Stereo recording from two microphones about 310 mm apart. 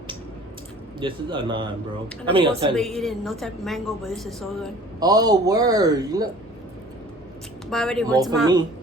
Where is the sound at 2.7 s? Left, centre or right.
Centre.